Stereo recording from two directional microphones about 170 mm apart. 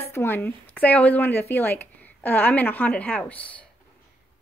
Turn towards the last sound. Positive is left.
turn(degrees=10)  # may be behind; listen again after turning